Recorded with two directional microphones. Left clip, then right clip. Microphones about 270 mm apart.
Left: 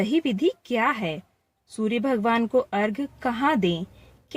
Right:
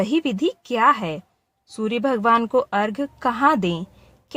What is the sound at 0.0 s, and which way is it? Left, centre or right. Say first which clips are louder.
Speech: right 2 dB; centre.